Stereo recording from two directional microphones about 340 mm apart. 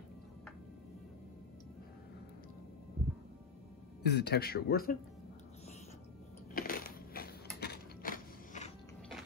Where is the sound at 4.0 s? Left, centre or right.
Left.